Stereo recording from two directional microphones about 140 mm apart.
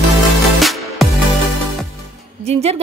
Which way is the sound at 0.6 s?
Centre (ahead or behind).